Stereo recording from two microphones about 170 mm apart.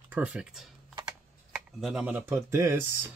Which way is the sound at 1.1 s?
5° right (ahead or behind).